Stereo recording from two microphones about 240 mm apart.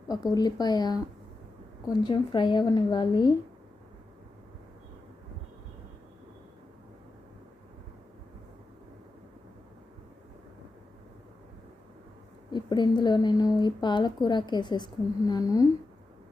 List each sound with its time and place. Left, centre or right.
0.1 s a woman's voice: centre
12.5 s a woman's voice: centre